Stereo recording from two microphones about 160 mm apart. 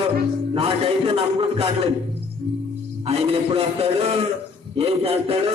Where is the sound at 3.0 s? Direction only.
40° right (ahead or behind).